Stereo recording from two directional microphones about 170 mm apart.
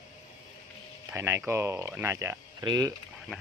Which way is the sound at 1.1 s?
15° right (ahead or behind).